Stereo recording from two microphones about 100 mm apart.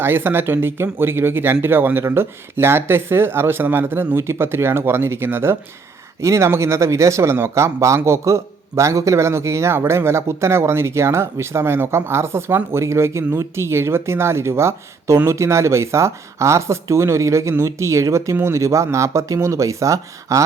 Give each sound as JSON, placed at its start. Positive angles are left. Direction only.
{"t": 0.0, "sound": "speech", "side_deg": -20}